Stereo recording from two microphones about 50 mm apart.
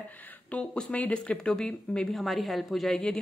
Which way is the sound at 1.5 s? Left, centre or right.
Centre.